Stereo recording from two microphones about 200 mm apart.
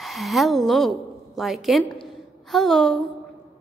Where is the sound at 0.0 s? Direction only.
Centre (ahead or behind).